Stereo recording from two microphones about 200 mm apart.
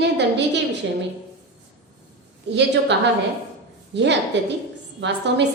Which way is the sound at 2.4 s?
60° right (ahead or behind).